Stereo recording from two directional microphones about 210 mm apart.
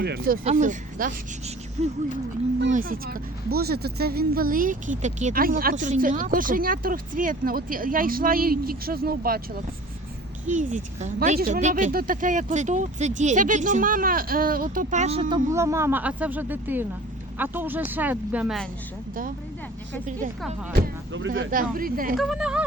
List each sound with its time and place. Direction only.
0.0 s speech: 50° right (ahead or behind)
0.4 s speech: 35° right (ahead or behind)
10.4 s speech: 35° right (ahead or behind)
15.5 s speech: 15° right (ahead or behind)
21.1 s speech: 65° right (ahead or behind)
21.5 s speech: 40° right (ahead or behind)
22.1 s speech: centre (ahead or behind)